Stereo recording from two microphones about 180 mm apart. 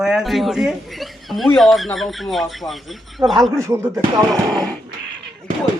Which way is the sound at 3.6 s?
15° right (ahead or behind).